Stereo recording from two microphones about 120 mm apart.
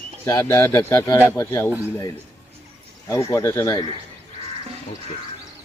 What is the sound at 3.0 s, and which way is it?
Speech, 25° left (ahead or behind).